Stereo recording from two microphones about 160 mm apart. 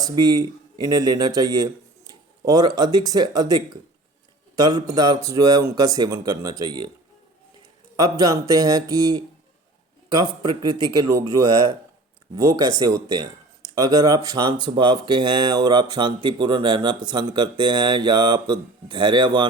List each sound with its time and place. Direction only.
0.0 s speech: 25° right (ahead or behind)
7.9 s speech: 25° right (ahead or behind)